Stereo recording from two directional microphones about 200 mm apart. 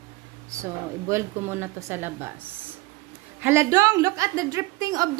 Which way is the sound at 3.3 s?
10° right (ahead or behind).